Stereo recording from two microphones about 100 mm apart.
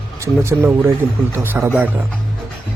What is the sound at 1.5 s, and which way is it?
Speech, 15° right (ahead or behind).